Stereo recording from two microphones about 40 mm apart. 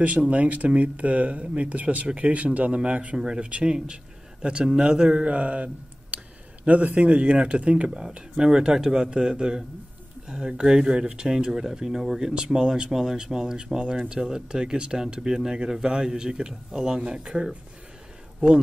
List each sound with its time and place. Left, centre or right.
0.0 s speech: right
8.0 s speech: centre